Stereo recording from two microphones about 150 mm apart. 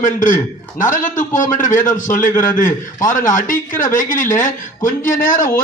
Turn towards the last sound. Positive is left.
turn(degrees=65)  # may be behind; listen again after turning